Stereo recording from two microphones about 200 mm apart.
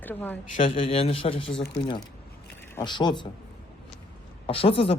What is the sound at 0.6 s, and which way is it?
Speech, 25° left (ahead or behind).